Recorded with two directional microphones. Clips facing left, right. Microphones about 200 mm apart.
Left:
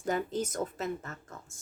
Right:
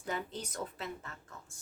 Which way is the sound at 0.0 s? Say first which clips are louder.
Left 8 dB; 45° left (ahead or behind).